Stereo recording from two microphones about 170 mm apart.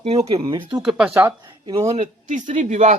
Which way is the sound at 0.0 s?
35° right (ahead or behind).